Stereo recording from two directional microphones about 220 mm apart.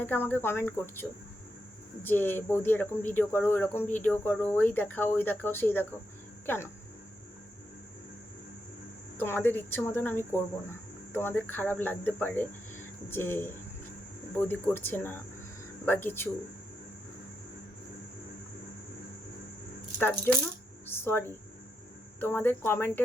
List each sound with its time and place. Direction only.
0.0 s speech: 10° left (ahead or behind)
9.1 s speech: 10° left (ahead or behind)
20.0 s speech: 10° left (ahead or behind)